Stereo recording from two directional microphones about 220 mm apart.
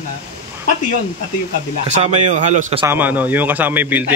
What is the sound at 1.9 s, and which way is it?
Speech, 30° right (ahead or behind).